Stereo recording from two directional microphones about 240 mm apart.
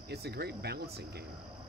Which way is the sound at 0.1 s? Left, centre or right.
Right.